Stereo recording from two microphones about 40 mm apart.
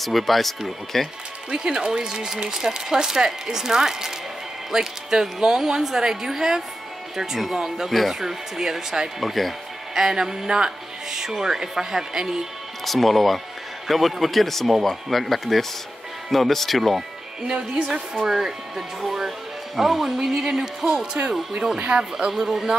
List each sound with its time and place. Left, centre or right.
0.0 s speech: centre
1.5 s speech: right
9.2 s speech: centre
9.9 s speech: centre
12.8 s speech: centre
18.3 s speech: centre; by 22.0 s right
22.3 s speech: centre